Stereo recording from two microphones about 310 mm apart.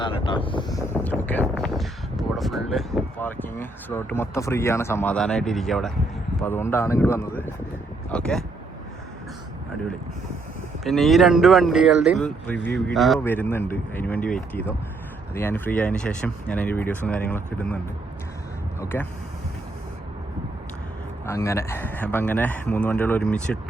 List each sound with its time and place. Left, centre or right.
0.0 s speech: centre
10.8 s speech: centre
18.8 s speech: centre
21.2 s speech: centre